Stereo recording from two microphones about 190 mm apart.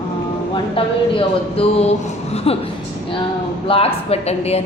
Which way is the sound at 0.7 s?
30° left (ahead or behind).